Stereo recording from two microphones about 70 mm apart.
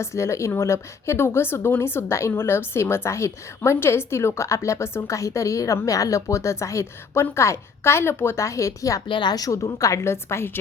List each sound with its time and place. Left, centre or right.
0.0 s a woman's voice: left
9.2 s a woman's voice: left